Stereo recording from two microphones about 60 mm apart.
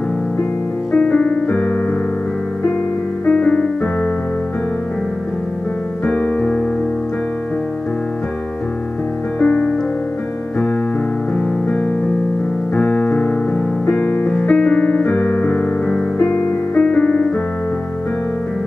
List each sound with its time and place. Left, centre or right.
0.9 s music: centre
3.3 s music: centre
6.2 s piano: left
9.4 s music: centre
12.7 s piano: centre
14.4 s music: centre
15.9 s music: centre